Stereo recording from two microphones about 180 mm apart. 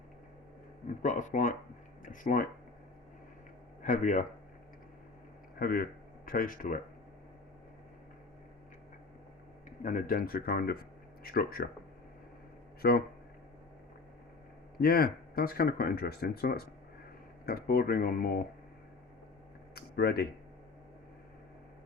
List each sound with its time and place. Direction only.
0.9 s speech: 45° left (ahead or behind)
3.8 s speech: 45° left (ahead or behind)
5.5 s speech: 55° left (ahead or behind)
9.6 s speech: 45° left (ahead or behind)
12.8 s speech: 60° left (ahead or behind)
14.8 s speech: 55° left (ahead or behind)
19.7 s a sound: 60° left (ahead or behind)